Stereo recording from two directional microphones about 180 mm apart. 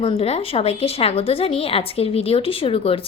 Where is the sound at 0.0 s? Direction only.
30° left (ahead or behind).